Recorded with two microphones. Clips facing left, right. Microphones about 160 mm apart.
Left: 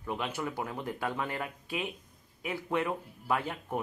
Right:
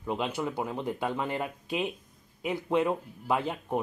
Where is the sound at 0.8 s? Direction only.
10° right (ahead or behind).